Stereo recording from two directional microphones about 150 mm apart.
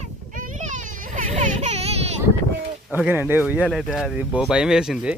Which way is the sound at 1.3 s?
50° right (ahead or behind).